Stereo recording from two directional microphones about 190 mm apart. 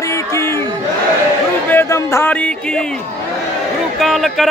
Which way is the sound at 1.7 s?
15° left (ahead or behind).